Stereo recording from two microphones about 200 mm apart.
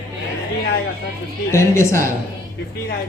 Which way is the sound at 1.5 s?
15° left (ahead or behind).